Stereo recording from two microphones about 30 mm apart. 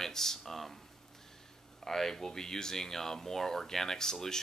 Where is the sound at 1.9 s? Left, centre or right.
Centre.